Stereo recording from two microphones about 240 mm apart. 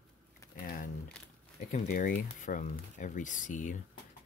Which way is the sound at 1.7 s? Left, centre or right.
Left.